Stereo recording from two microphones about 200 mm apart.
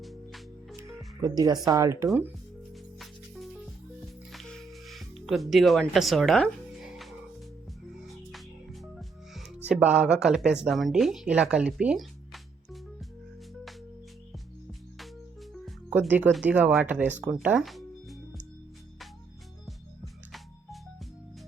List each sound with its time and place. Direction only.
0.0 s music: centre (ahead or behind)
1.2 s speech: 20° right (ahead or behind)
4.3 s music: centre (ahead or behind)
9.6 s speech: 5° right (ahead or behind)
14.7 s music: centre (ahead or behind)
15.6 s speech: 5° right (ahead or behind)